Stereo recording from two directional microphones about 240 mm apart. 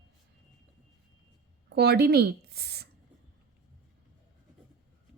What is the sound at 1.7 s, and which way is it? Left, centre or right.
A woman's voice, right.